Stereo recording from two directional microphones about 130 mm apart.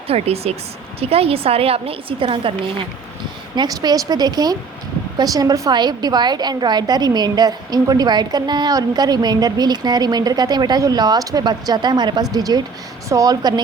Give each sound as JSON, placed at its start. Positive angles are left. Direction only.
{"t": 0.1, "sound": "a woman's voice", "side_deg": -50}
{"t": 3.5, "sound": "a woman's voice", "side_deg": -30}